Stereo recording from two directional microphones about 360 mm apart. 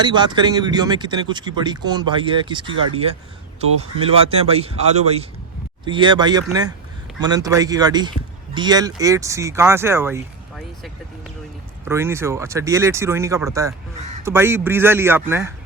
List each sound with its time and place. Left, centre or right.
0.0 s speech: centre
11.9 s speech: centre